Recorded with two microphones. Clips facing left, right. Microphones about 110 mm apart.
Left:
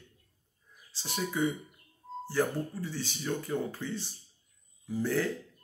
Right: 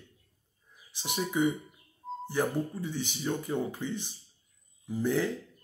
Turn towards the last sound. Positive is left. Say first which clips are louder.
# right 2 dB
turn(degrees=-15)  # may be behind; listen again after turning